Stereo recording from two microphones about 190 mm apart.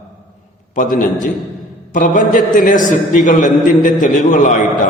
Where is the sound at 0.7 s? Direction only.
45° left (ahead or behind).